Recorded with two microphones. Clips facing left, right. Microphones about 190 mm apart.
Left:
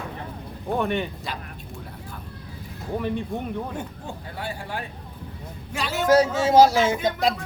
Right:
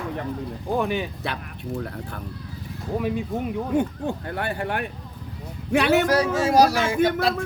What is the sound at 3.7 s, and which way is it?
Speech, 60° right (ahead or behind).